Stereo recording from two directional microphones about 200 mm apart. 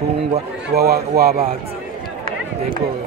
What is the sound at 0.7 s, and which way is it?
Speech, 50° right (ahead or behind).